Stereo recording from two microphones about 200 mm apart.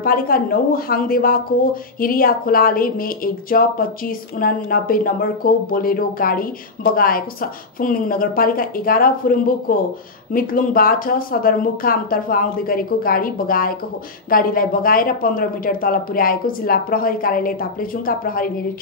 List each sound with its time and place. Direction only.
0.0 s speech: 45° left (ahead or behind)